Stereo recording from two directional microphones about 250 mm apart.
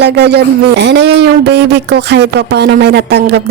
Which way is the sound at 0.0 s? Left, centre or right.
Right.